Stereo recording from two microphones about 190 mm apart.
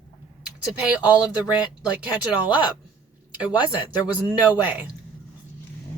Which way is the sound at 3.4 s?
10° right (ahead or behind).